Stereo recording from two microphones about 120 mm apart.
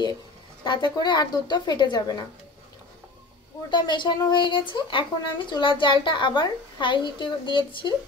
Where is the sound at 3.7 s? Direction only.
40° left (ahead or behind).